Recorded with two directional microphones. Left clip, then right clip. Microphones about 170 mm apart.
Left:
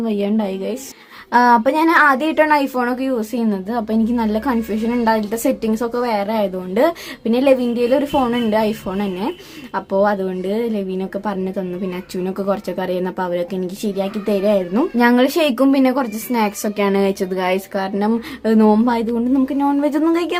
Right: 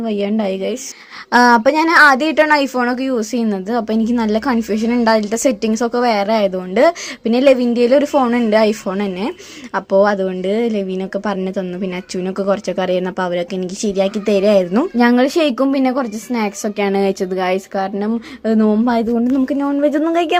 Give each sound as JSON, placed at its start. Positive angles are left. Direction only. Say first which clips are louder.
{"t": 0.0, "sound": "speech", "louder": "right 2 dB", "side_deg": -15}